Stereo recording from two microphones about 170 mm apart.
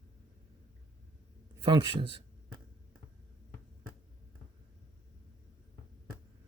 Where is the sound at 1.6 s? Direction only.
30° right (ahead or behind).